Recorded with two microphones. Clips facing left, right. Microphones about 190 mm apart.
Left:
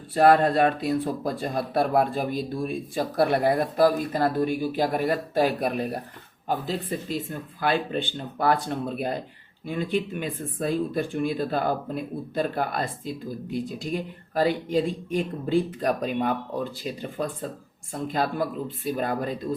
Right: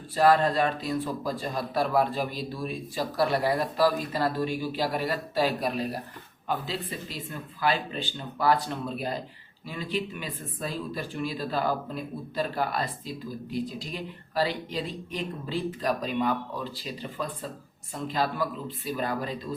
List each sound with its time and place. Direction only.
0.1 s speech: 55° left (ahead or behind)